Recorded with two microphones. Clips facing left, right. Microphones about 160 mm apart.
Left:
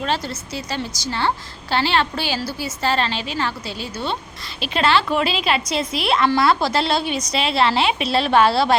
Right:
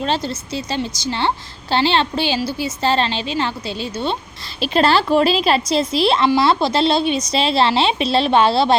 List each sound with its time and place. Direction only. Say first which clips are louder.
0.0 s a woman's voice: right 3 dB; 25° right (ahead or behind)
4.6 s a woman's voice: right 3 dB; 35° right (ahead or behind)